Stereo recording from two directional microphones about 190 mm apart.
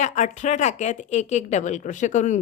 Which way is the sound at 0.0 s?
40° left (ahead or behind).